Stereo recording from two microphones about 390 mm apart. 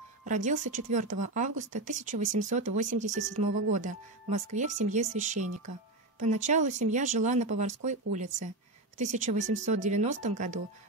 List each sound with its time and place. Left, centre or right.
0.2 s speech: centre